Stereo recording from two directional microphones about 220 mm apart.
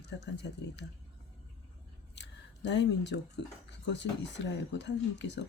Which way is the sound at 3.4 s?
50° left (ahead or behind).